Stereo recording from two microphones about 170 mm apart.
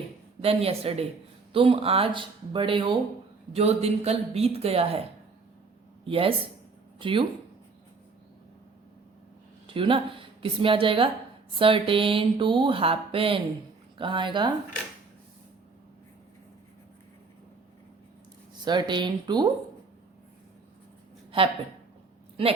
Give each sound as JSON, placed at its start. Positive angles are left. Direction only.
{"t": 0.4, "sound": "speech", "side_deg": -35}
{"t": 6.1, "sound": "speech", "side_deg": -35}
{"t": 9.7, "sound": "speech", "side_deg": -30}
{"t": 18.6, "sound": "speech", "side_deg": -25}
{"t": 21.3, "sound": "speech", "side_deg": -30}